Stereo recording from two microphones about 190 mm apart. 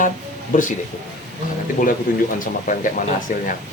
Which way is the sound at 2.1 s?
45° left (ahead or behind).